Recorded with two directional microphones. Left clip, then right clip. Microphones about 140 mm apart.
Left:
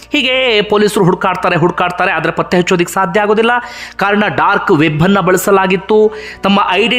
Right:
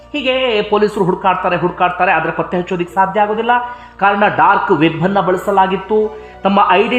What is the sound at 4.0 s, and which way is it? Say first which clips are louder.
Speech: right 1 dB; 35° left (ahead or behind).